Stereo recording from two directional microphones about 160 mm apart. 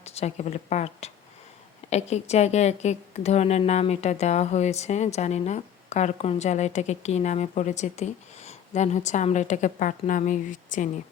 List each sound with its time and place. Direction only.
0.0 s a woman's voice: 40° left (ahead or behind)